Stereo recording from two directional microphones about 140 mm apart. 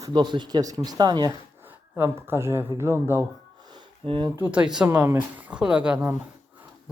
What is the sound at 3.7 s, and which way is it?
Sniff, 35° right (ahead or behind).